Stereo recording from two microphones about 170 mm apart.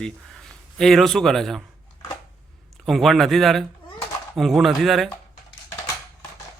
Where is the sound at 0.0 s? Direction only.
5° left (ahead or behind).